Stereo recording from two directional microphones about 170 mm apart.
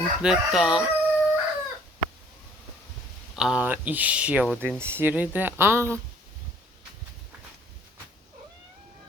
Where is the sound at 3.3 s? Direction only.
5° right (ahead or behind).